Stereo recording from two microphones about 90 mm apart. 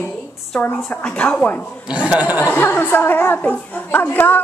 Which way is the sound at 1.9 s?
10° right (ahead or behind).